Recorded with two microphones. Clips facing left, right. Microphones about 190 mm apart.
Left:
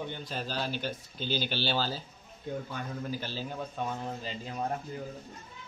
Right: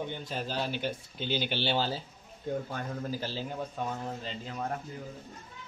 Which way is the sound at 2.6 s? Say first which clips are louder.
Right 1 dB; 40° right (ahead or behind).